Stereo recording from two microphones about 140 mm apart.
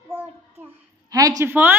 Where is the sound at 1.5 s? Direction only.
15° right (ahead or behind).